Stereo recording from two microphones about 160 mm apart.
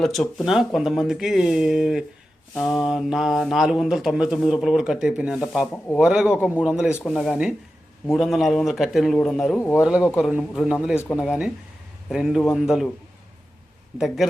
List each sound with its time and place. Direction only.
0.0 s a man's voice: centre (ahead or behind)
9.6 s speech: 15° left (ahead or behind)
9.8 s speech: 5° right (ahead or behind)
14.2 s speech: centre (ahead or behind)